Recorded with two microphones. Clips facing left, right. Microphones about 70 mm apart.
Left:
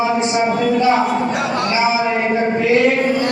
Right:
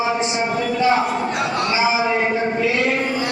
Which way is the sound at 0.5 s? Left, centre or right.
Left.